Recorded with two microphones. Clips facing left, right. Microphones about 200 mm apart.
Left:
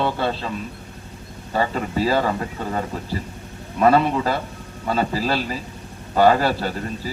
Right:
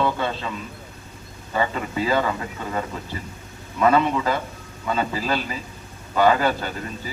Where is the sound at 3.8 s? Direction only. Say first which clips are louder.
Left 2 dB; 35° left (ahead or behind).